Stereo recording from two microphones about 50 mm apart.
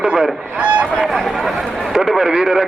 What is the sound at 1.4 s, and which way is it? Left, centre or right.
A man's voice, centre.